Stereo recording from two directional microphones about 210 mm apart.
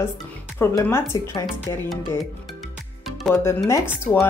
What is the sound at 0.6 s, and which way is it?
Speech, 10° left (ahead or behind).